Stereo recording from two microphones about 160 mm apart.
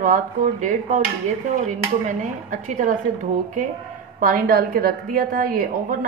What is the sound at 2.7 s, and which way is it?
A woman's voice, 55° right (ahead or behind).